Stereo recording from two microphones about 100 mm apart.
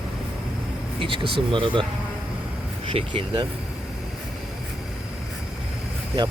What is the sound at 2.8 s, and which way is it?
Speech, 60° right (ahead or behind).